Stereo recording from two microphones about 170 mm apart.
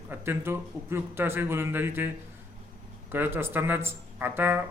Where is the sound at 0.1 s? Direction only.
15° right (ahead or behind).